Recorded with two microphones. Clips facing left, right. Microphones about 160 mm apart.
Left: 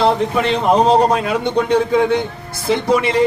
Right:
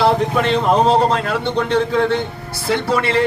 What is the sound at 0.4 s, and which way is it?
A man's voice, 5° left (ahead or behind).